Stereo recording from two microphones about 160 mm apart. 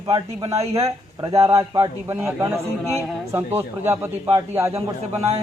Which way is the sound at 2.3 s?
15° right (ahead or behind).